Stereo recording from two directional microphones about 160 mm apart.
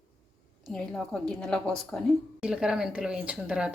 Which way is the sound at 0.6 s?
5° left (ahead or behind).